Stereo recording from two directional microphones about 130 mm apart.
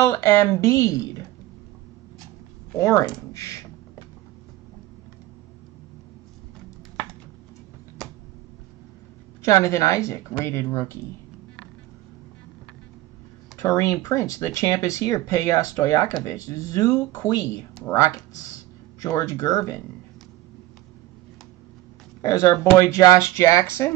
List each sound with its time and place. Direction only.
0.0 s speech: 20° left (ahead or behind)
2.8 s speech: 25° left (ahead or behind)
9.4 s speech: 20° left (ahead or behind)
13.6 s speech: 25° left (ahead or behind)
22.2 s speech: 20° left (ahead or behind)